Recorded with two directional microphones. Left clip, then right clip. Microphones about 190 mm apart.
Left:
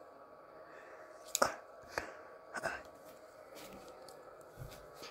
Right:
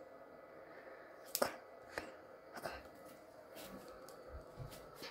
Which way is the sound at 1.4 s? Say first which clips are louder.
Left 5 dB; 5° left (ahead or behind).